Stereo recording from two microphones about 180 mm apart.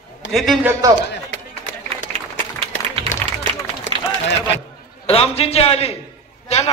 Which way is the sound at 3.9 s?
30° right (ahead or behind).